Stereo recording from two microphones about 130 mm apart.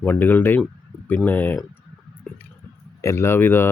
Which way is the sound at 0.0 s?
15° left (ahead or behind).